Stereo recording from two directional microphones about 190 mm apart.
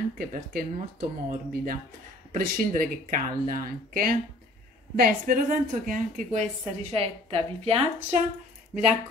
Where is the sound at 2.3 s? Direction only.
45° right (ahead or behind).